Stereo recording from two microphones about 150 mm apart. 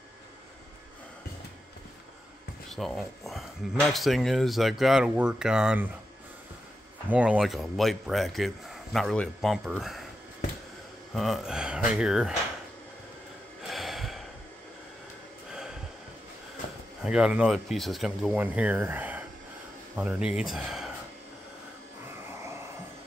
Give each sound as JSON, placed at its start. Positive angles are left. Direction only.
{"t": 2.7, "sound": "speech", "side_deg": 0}
{"t": 7.1, "sound": "speech", "side_deg": -5}
{"t": 11.1, "sound": "speech", "side_deg": 0}
{"t": 13.6, "sound": "gasp", "side_deg": 0}
{"t": 17.0, "sound": "speech", "side_deg": -5}